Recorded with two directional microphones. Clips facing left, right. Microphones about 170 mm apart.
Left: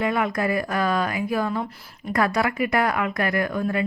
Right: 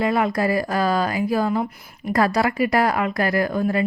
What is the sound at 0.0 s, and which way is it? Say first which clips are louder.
Speech: right 3 dB; 30° right (ahead or behind).